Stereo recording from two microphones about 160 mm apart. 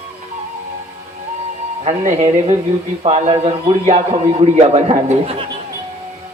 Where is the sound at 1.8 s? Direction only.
40° right (ahead or behind).